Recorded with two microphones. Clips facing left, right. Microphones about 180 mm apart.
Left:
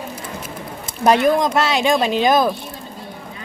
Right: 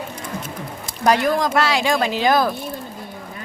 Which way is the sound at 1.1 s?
20° left (ahead or behind).